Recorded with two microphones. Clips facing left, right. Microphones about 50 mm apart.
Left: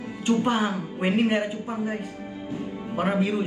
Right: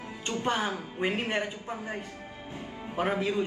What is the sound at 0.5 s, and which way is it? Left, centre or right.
A man's voice, left.